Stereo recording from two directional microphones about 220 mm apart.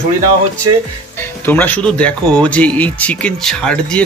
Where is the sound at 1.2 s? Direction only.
10° left (ahead or behind).